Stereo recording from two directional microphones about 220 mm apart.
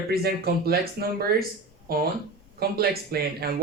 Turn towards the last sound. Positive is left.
turn(degrees=-45)  # may be behind; listen again after turning